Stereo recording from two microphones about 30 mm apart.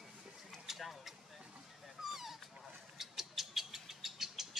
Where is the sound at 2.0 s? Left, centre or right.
Centre.